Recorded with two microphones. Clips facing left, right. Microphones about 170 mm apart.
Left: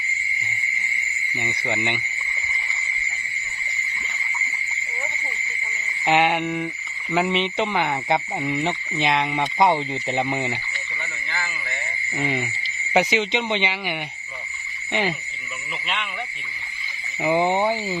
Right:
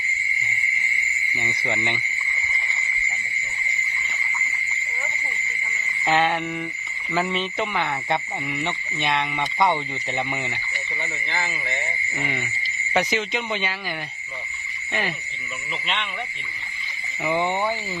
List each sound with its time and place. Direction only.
1.4 s speech: 15° left (ahead or behind)
6.1 s speech: 15° left (ahead or behind)
8.4 s frog: 30° left (ahead or behind)
9.0 s speech: 20° left (ahead or behind)
11.3 s a sound: 20° right (ahead or behind)
12.2 s speech: 20° left (ahead or behind)
17.2 s speech: 20° left (ahead or behind)